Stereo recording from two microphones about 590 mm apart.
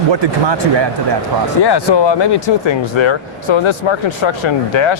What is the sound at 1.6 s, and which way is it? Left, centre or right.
Speech, left.